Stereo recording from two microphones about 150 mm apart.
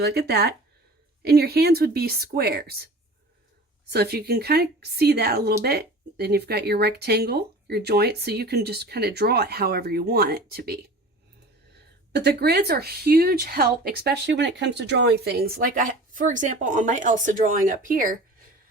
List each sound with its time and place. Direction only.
0.0 s speech: 90° right
12.1 s speech: 90° right; by 18.2 s 65° right (ahead or behind)